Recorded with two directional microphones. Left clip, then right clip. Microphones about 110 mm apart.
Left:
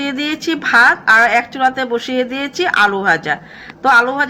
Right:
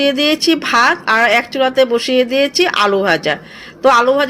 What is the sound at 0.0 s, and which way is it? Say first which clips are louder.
A woman's voice: right 7 dB; 20° right (ahead or behind).